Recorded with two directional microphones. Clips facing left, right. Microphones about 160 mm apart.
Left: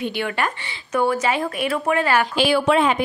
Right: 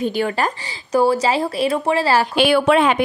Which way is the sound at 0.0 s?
40° right (ahead or behind).